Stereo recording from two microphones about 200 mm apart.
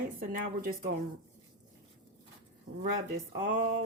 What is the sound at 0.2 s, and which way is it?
Speech, 50° right (ahead or behind).